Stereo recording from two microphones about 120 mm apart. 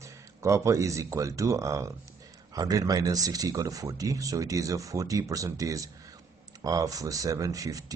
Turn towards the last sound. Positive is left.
turn(degrees=-30)  # may be behind; listen again after turning